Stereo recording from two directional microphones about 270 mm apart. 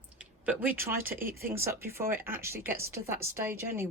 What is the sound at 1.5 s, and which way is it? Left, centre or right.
Speech, centre.